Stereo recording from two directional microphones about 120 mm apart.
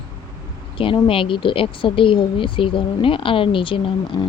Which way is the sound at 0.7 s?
45° left (ahead or behind).